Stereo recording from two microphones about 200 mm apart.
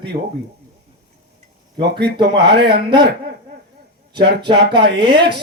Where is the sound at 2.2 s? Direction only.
55° right (ahead or behind).